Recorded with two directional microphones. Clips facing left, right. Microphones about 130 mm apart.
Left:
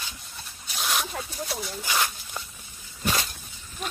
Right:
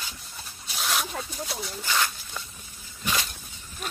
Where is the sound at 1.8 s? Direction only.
15° left (ahead or behind).